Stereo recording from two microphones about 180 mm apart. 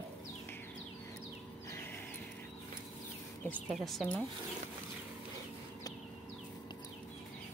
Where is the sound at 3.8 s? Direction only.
Centre (ahead or behind).